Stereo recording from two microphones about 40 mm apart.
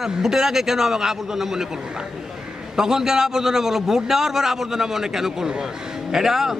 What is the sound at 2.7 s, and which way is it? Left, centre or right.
A man's voice, centre.